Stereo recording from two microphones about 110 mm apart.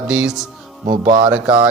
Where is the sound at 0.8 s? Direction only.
90° right.